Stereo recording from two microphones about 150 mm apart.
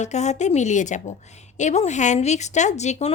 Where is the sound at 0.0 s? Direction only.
50° left (ahead or behind).